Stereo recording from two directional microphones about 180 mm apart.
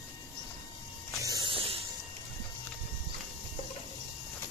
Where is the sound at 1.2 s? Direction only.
20° right (ahead or behind).